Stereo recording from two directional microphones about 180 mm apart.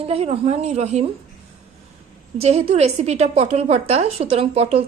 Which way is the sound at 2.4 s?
35° right (ahead or behind).